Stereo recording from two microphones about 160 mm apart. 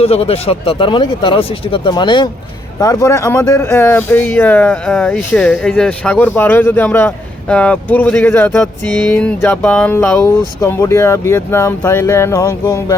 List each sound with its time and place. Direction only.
0.0 s speech: 40° left (ahead or behind); by 13.0 s 20° left (ahead or behind)